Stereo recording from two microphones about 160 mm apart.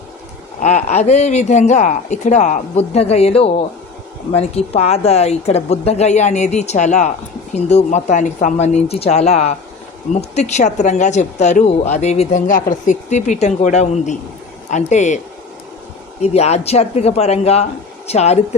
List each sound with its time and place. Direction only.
0.6 s speech: 50° left (ahead or behind)
12.5 s speech: 55° left (ahead or behind)
16.2 s speech: 40° left (ahead or behind)